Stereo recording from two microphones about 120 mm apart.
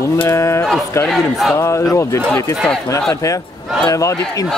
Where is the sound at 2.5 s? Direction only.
5° left (ahead or behind).